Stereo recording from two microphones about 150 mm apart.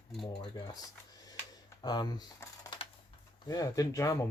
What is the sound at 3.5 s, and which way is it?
Speech, 25° left (ahead or behind).